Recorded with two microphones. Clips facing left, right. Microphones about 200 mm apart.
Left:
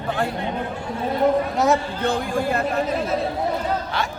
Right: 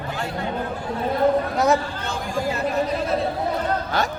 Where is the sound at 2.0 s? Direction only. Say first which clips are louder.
Left 4 dB; 55° left (ahead or behind).